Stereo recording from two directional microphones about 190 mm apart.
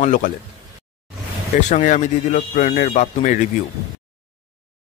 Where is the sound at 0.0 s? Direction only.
40° left (ahead or behind).